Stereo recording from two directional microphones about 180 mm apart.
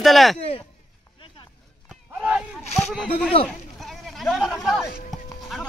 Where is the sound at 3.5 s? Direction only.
Centre (ahead or behind).